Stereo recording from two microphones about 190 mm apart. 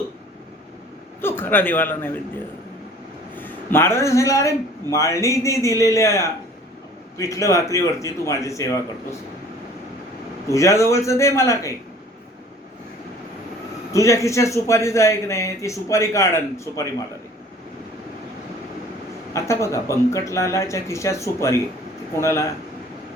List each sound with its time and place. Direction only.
1.2 s a man's voice: 10° left (ahead or behind)
10.5 s a man's voice: 15° left (ahead or behind)
13.9 s a man's voice: 15° left (ahead or behind)
19.3 s a man's voice: 15° left (ahead or behind)